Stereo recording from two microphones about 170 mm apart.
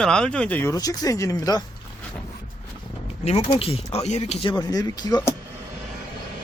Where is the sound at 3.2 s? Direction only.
40° left (ahead or behind); by 5.3 s 25° left (ahead or behind).